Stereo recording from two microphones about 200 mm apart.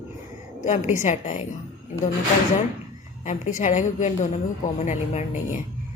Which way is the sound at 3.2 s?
40° left (ahead or behind).